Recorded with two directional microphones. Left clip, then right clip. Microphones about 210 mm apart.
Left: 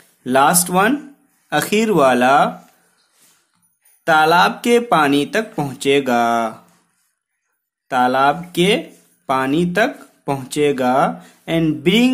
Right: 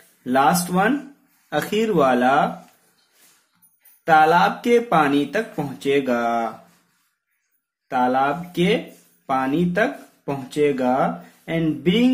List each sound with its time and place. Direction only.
0.2 s speech: 40° left (ahead or behind)
4.0 s speech: 40° left (ahead or behind)
7.9 s speech: 40° left (ahead or behind)